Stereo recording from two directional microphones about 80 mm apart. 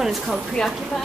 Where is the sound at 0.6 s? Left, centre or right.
Centre.